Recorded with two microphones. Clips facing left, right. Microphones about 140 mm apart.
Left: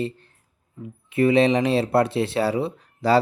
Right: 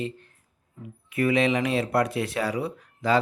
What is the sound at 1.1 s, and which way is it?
Speech, 30° left (ahead or behind).